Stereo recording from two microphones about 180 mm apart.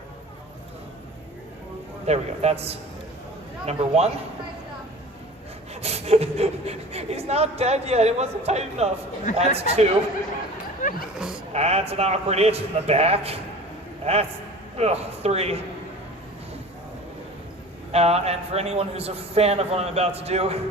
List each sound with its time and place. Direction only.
2.0 s speech: 35° right (ahead or behind)
5.8 s speech: 35° right (ahead or behind)
11.5 s a man's voice: 35° right (ahead or behind)
17.9 s speech: 35° right (ahead or behind)